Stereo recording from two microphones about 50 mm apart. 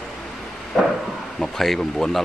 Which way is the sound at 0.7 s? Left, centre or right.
Centre.